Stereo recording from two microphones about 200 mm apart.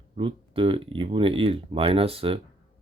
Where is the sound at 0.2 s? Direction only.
25° right (ahead or behind).